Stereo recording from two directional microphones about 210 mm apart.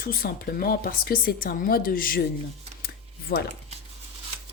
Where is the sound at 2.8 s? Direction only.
50° left (ahead or behind).